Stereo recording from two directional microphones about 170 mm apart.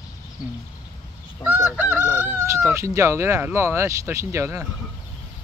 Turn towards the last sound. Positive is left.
turn(degrees=-15)  # may be behind; listen again after turning